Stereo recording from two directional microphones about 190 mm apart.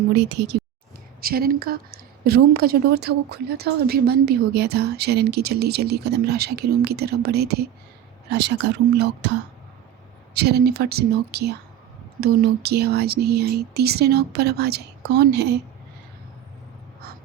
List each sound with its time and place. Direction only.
0.1 s a woman's voice: 60° right (ahead or behind)
1.2 s a woman's voice: 50° right (ahead or behind)
10.3 s a woman's voice: 60° right (ahead or behind)